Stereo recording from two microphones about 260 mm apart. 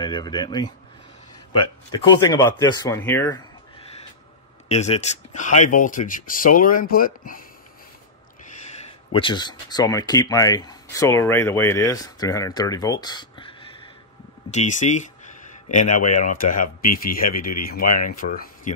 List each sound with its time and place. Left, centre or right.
0.0 s speech: centre
4.6 s speech: left
9.1 s speech: centre; by 18.5 s left